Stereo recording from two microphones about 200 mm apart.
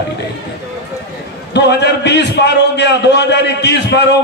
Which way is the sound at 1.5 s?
55° left (ahead or behind).